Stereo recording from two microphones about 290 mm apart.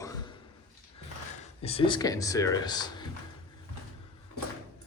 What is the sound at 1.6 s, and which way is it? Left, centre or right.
Speech, centre.